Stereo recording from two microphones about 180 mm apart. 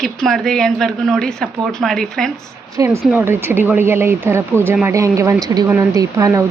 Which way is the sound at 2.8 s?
15° right (ahead or behind).